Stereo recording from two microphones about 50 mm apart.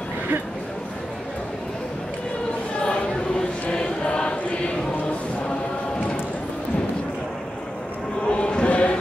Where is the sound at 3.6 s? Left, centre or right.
Left.